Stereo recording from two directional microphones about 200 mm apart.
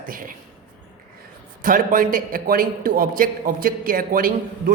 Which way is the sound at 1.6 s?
45° right (ahead or behind).